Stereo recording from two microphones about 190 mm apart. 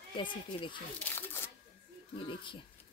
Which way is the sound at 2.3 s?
25° left (ahead or behind).